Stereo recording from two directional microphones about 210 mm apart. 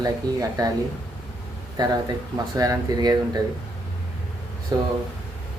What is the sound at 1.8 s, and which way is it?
A man's voice, 20° right (ahead or behind).